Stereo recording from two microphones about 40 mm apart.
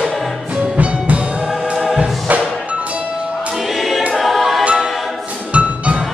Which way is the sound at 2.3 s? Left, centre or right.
Right.